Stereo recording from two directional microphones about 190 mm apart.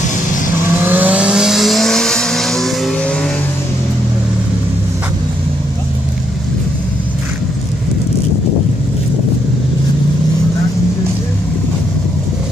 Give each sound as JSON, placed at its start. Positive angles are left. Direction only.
{"t": 0.7, "sound": "vehicle", "side_deg": -10}